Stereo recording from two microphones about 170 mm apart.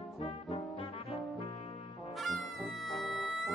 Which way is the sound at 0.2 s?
35° left (ahead or behind).